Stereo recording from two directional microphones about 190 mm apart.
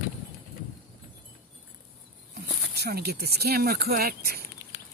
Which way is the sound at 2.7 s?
60° right (ahead or behind).